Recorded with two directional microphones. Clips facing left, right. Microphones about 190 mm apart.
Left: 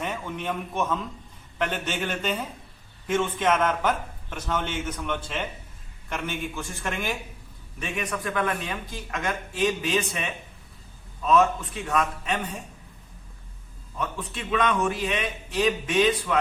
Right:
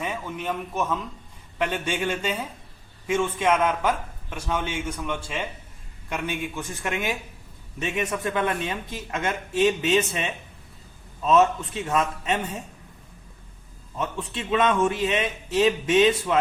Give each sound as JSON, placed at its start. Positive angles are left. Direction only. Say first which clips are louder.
{"t": 0.0, "sound": "a man's voice", "louder": "right 1 dB", "side_deg": -5}
{"t": 14.0, "sound": "speech", "louder": "right 2 dB", "side_deg": -25}